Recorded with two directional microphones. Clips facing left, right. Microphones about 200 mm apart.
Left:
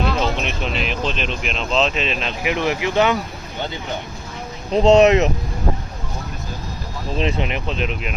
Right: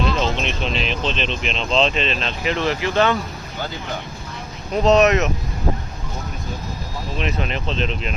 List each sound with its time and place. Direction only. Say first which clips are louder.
0.2 s speech: even; 10° left (ahead or behind)
4.7 s speech: left 3 dB; 30° left (ahead or behind)
7.2 s speech: left 4 dB; 30° left (ahead or behind)
7.4 s speech: even; 15° left (ahead or behind)